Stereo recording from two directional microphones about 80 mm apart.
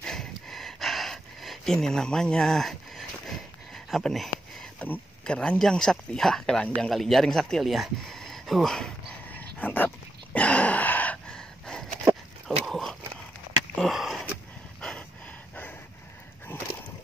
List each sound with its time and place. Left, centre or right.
0.0 s gasp: centre
4.7 s speech: left
5.2 s speech: centre
9.3 s a sound: left
11.2 s gasp: centre
12.4 s dog: centre
13.7 s sniff: centre
14.8 s a sound: centre